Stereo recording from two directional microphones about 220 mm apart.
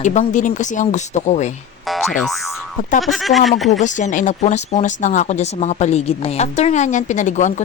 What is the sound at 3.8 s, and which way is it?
Speech, 35° left (ahead or behind).